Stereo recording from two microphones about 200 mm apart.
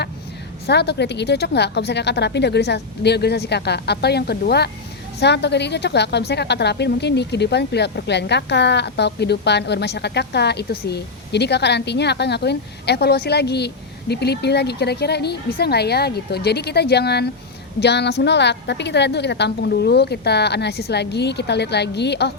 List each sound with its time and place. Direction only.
0.7 s a woman's voice: 55° left (ahead or behind)